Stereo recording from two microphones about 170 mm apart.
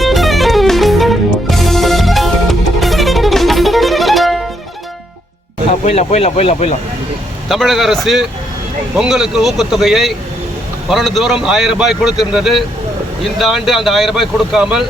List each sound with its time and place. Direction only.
0.0 s music: centre (ahead or behind)
5.8 s speech: 40° left (ahead or behind)
7.4 s speech: centre (ahead or behind)